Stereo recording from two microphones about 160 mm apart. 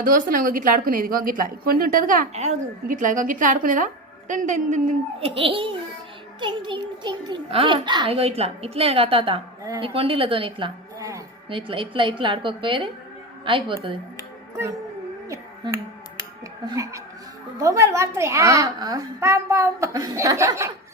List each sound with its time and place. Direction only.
0.0 s a woman's voice: 60° right (ahead or behind)
5.2 s a child's voice: 35° right (ahead or behind)
15.3 s a sound: 20° right (ahead or behind)
16.6 s a child's voice: 20° right (ahead or behind)